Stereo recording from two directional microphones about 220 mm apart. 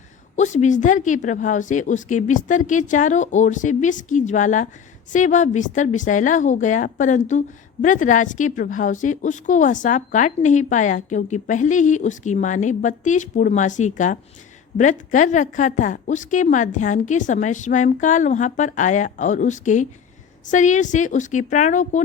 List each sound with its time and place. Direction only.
0.3 s a woman's voice: 35° left (ahead or behind)